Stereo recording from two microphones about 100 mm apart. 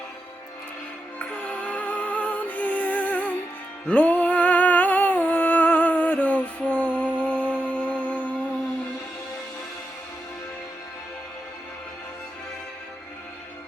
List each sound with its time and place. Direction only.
1.2 s music: 15° left (ahead or behind)